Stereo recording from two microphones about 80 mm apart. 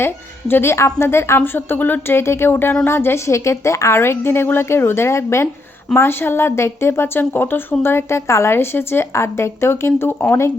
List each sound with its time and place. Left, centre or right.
0.0 s a woman's voice: left